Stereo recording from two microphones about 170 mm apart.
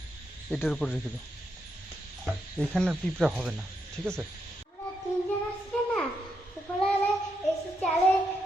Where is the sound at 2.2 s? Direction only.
5° left (ahead or behind).